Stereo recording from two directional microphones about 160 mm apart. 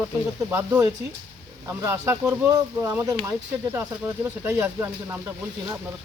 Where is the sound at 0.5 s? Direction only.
15° right (ahead or behind).